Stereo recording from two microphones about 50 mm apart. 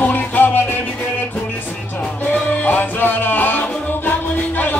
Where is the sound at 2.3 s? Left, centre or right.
Left.